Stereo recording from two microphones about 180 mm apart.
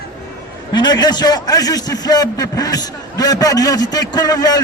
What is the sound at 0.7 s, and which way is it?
A man's voice, 25° left (ahead or behind).